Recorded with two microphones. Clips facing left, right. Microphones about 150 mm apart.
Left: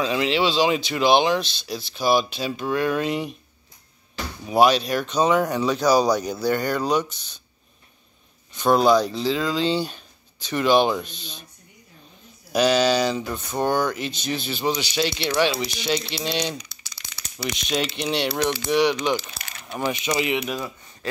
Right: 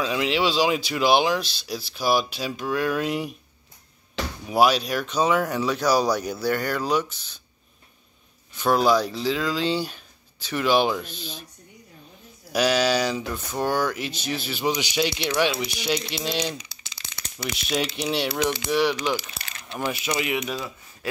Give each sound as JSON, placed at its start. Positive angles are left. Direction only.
{"t": 0.0, "sound": "speech", "side_deg": -5}
{"t": 4.5, "sound": "speech", "side_deg": -5}
{"t": 8.5, "sound": "speech", "side_deg": -5}
{"t": 12.5, "sound": "speech", "side_deg": -5}
{"t": 16.8, "sound": "crumpling", "side_deg": -25}
{"t": 17.5, "sound": "speech", "side_deg": 0}
{"t": 19.3, "sound": "a sound", "side_deg": 10}
{"t": 20.1, "sound": "speech", "side_deg": 5}